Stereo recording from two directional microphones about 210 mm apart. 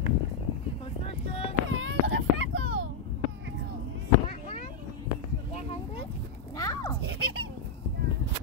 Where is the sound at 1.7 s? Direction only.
70° right (ahead or behind).